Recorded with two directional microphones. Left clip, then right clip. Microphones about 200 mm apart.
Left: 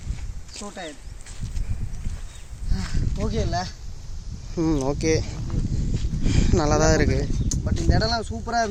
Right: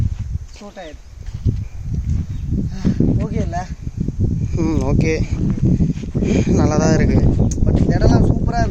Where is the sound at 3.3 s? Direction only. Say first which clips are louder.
Right 2 dB; 15° right (ahead or behind).